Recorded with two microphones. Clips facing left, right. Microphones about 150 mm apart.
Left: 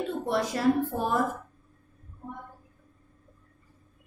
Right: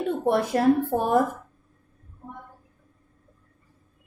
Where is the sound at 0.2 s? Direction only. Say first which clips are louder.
Right 5 dB; 55° right (ahead or behind).